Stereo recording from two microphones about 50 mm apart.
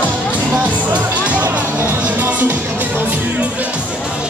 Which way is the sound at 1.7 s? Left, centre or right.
Right.